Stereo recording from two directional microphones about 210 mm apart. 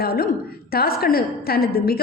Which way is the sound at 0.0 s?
45° left (ahead or behind).